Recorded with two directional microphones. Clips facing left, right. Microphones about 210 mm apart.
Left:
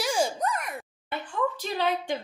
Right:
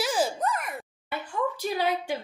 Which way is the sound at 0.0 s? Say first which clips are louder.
Even; centre (ahead or behind).